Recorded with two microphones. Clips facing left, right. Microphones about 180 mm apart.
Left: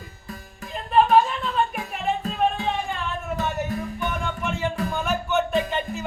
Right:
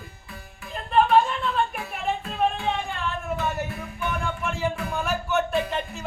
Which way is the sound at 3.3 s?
40° left (ahead or behind).